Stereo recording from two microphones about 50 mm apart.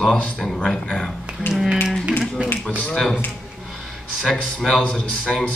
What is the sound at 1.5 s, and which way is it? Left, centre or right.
Tap, left.